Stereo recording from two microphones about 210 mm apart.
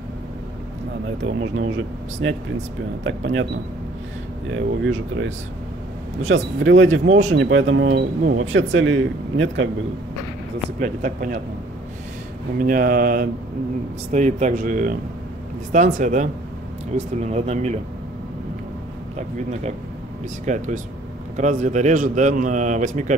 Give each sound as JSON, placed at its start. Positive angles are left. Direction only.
{"t": 1.2, "sound": "speech", "side_deg": -65}
{"t": 3.0, "sound": "speech", "side_deg": -60}
{"t": 4.5, "sound": "speech", "side_deg": -65}
{"t": 8.4, "sound": "speech", "side_deg": -70}
{"t": 10.8, "sound": "a man's voice", "side_deg": -40}
{"t": 12.5, "sound": "a man's voice", "side_deg": -40}
{"t": 20.4, "sound": "a man's voice", "side_deg": -35}